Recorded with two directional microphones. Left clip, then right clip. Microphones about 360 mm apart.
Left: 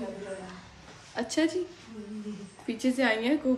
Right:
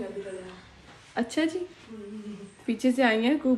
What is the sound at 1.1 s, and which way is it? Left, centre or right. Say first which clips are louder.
Speech: right 1 dB; centre.